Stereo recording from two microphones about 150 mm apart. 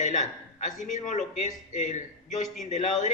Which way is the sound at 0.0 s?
55° left (ahead or behind).